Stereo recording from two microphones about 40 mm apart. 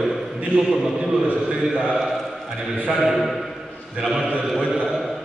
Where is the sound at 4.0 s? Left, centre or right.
Centre.